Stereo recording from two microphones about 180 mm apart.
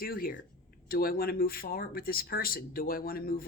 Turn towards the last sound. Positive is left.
turn(degrees=55)  # may be behind; listen again after turning